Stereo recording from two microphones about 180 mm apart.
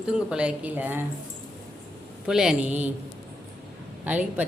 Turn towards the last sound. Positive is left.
turn(degrees=-10)  # may be behind; listen again after turning